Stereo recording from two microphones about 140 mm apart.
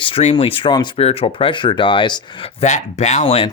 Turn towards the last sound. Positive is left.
turn(degrees=45)  # may be behind; listen again after turning